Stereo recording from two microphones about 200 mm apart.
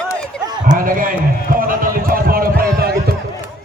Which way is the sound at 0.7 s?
45° right (ahead or behind).